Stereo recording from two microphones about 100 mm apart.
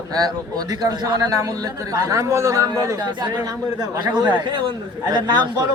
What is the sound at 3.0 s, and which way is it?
Speech, 45° right (ahead or behind).